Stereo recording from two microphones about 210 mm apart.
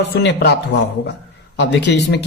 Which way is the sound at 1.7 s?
55° left (ahead or behind).